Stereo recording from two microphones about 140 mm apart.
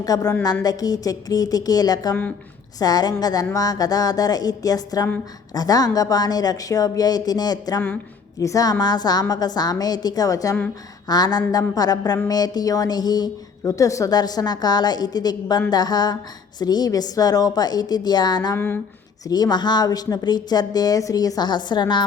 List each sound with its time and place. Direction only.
0.0 s speech: 25° left (ahead or behind)
18.5 s a sound: 15° left (ahead or behind)
19.3 s speech: 30° left (ahead or behind)